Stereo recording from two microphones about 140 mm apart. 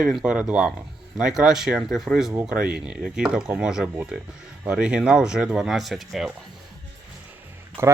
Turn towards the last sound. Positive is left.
turn(degrees=-20)  # may be behind; listen again after turning